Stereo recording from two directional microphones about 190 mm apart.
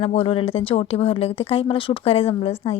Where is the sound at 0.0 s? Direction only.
30° left (ahead or behind).